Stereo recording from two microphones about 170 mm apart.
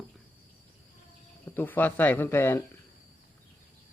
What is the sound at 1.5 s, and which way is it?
Speech, 10° left (ahead or behind).